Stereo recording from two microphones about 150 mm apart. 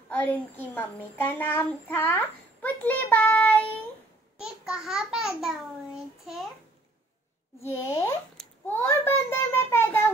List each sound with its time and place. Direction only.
0.1 s a child's voice: 10° left (ahead or behind)
4.4 s a child's voice: 5° right (ahead or behind)
5.9 s child singing: 5° right (ahead or behind)
7.6 s a child's voice: 15° left (ahead or behind)